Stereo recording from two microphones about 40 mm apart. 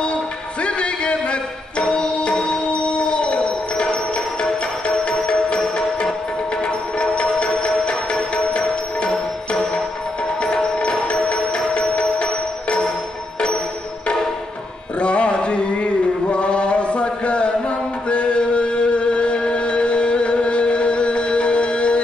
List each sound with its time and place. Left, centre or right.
0.0 s music: left
15.0 s music: left